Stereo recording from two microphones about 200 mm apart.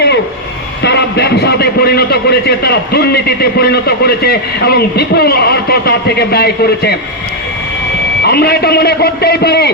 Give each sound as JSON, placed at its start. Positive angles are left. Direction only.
{"t": 0.8, "sound": "a man's voice", "side_deg": 60}
{"t": 8.2, "sound": "a man's voice", "side_deg": 50}